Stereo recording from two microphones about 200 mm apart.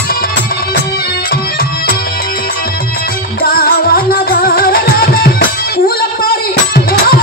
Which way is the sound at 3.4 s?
50° left (ahead or behind).